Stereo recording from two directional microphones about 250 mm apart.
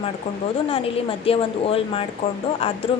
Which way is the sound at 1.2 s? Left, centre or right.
Left.